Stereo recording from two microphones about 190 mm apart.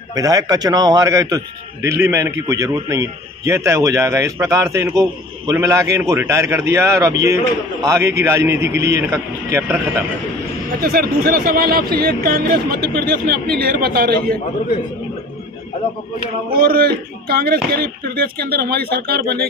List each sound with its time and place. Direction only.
0.1 s a man's voice: 15° right (ahead or behind)
10.8 s speech: 50° right (ahead or behind)
16.5 s speech: 55° right (ahead or behind)